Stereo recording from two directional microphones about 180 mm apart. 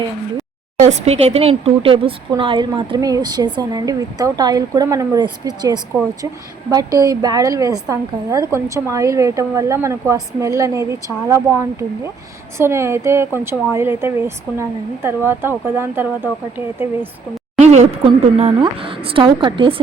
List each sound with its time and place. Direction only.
0.8 s a woman's voice: 40° right (ahead or behind); by 17.1 s 10° right (ahead or behind)
17.6 s speech: 35° right (ahead or behind)